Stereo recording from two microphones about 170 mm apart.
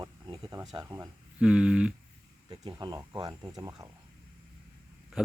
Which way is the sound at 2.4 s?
25° right (ahead or behind).